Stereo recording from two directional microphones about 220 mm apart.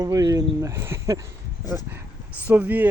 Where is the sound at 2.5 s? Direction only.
10° right (ahead or behind).